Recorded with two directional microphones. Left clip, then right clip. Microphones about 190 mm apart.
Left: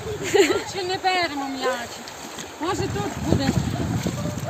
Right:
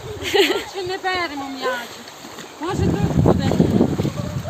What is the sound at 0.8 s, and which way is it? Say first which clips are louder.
Speech: even; 25° left (ahead or behind).